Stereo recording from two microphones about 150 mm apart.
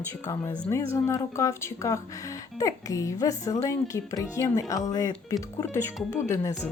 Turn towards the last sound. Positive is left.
turn(degrees=20)  # may be behind; listen again after turning